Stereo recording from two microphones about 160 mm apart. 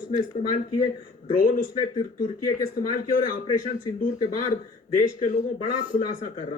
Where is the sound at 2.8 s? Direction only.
65° left (ahead or behind).